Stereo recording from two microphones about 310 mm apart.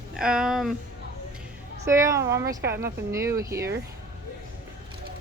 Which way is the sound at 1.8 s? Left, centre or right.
Centre.